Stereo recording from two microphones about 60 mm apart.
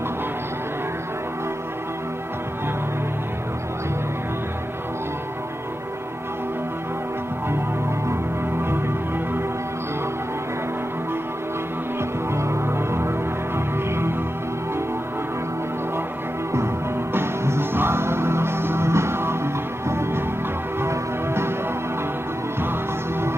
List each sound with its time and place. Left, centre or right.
8.6 s music: right
12.3 s music: right
16.5 s music: right